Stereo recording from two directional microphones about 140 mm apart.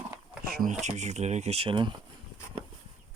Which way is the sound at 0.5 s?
65° right (ahead or behind).